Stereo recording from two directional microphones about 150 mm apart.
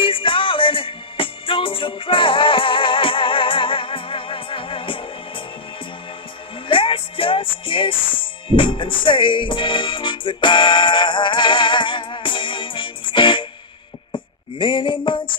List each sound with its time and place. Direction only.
0.0 s music: 35° left (ahead or behind)
6.7 s music: 35° left (ahead or behind)
14.1 s a sound: 35° left (ahead or behind)